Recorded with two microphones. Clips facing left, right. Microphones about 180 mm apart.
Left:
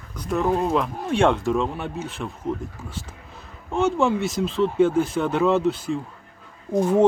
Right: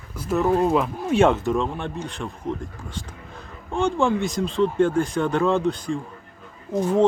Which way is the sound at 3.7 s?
Centre (ahead or behind).